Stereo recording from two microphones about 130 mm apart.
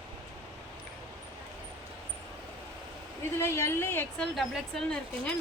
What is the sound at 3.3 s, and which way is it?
Speech, 20° left (ahead or behind).